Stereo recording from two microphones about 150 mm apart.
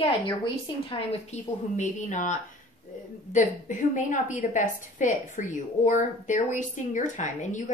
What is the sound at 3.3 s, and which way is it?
A woman's voice, 60° left (ahead or behind).